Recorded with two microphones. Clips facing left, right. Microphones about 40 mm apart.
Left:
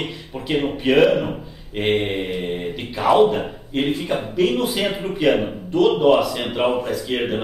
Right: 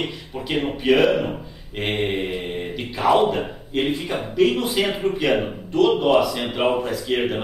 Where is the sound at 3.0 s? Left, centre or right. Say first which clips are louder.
Left 2 dB; centre.